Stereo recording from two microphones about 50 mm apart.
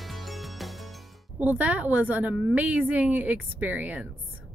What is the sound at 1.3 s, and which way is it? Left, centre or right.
A woman's voice, right.